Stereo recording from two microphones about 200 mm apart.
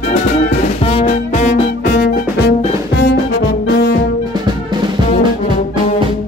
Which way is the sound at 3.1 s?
60° left (ahead or behind).